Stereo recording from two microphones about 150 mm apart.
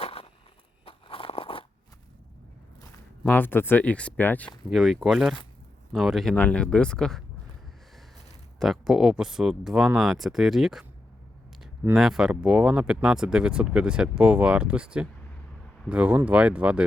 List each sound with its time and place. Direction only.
0.0 s walk: 40° left (ahead or behind)
0.9 s crunch: 35° left (ahead or behind)
2.8 s speech: 15° left (ahead or behind)
8.5 s speech: centre (ahead or behind)
11.9 s speech: centre (ahead or behind)